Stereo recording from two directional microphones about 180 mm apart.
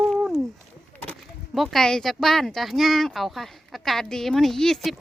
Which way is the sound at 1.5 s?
Centre (ahead or behind).